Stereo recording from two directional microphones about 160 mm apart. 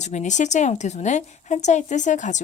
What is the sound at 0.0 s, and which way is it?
A woman's voice, 45° left (ahead or behind).